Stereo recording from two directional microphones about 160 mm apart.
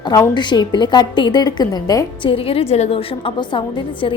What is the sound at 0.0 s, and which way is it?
A woman's voice, 25° left (ahead or behind).